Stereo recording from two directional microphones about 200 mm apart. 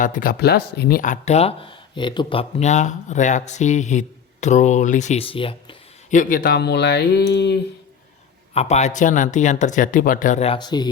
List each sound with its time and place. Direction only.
0.0 s speech: 40° left (ahead or behind); by 5.7 s 25° left (ahead or behind)
6.1 s speech: 40° left (ahead or behind); by 7.6 s 60° left (ahead or behind)
8.5 s speech: 35° left (ahead or behind)